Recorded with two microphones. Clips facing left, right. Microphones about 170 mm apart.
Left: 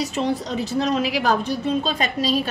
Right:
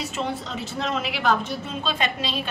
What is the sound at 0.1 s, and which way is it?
A woman's voice, 35° left (ahead or behind).